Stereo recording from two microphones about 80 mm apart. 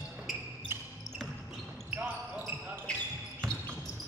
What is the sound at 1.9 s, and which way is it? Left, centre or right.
Basketball bounce, centre.